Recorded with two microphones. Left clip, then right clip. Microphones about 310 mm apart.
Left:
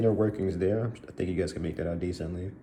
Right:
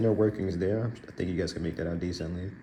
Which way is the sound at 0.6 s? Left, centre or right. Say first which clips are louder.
Left 1 dB; left.